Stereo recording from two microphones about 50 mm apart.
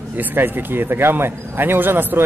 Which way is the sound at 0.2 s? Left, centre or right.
Right.